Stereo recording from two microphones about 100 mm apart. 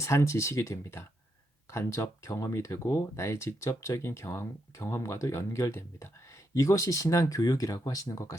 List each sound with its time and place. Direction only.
0.0 s speech: 30° left (ahead or behind)